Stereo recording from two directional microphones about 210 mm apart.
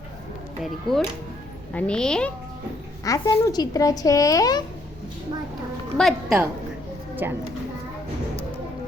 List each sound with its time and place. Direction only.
0.6 s a child's voice: centre (ahead or behind)
3.0 s speech: 15° left (ahead or behind)
6.0 s a child's voice: centre (ahead or behind)